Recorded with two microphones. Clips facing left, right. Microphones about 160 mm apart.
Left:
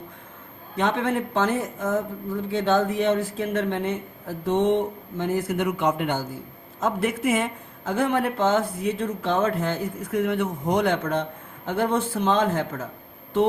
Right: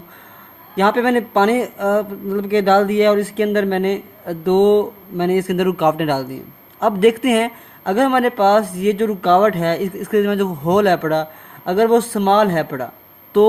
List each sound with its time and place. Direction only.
0.8 s speech: 70° right (ahead or behind)